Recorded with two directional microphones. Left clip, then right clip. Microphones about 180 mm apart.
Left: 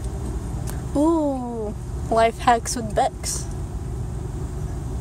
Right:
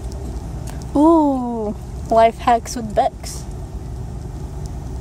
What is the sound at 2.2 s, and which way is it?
Speech, 15° right (ahead or behind).